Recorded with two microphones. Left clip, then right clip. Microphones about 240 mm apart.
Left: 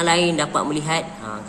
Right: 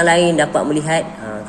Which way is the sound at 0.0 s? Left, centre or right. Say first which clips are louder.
Right 6 dB; centre.